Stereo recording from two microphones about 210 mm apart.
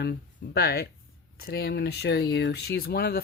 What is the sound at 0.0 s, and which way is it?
Speech, 50° left (ahead or behind).